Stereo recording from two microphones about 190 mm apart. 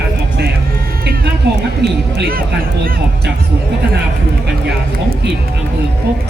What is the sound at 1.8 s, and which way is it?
Speech, 60° right (ahead or behind).